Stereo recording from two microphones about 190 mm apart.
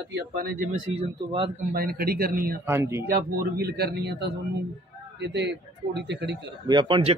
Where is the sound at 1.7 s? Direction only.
50° right (ahead or behind).